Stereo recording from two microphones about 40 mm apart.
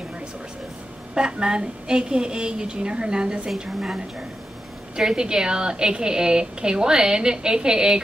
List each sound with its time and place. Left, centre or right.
1.1 s a woman's voice: right
3.4 s a woman's voice: centre
4.9 s a woman's voice: centre